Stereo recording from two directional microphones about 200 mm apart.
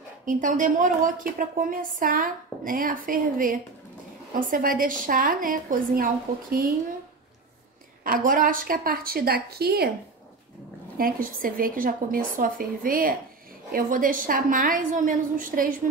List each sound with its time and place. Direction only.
0.2 s a woman's voice: 40° right (ahead or behind)
8.0 s a woman's voice: 45° right (ahead or behind)
11.0 s a woman's voice: 45° right (ahead or behind)